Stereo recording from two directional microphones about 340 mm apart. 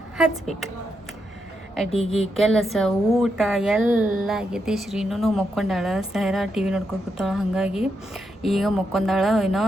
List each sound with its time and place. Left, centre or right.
1.9 s speech: centre
2.4 s a woman's voice: centre